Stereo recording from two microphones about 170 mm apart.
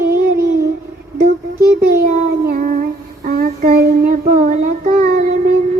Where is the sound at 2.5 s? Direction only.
60° right (ahead or behind).